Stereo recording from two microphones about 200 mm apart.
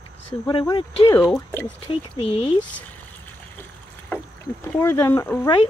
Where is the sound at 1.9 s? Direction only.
30° left (ahead or behind).